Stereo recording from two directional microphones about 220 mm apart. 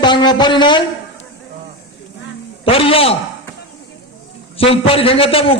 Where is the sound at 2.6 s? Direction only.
25° left (ahead or behind).